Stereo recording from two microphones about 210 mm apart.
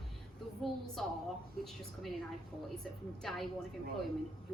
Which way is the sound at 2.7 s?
Centre (ahead or behind).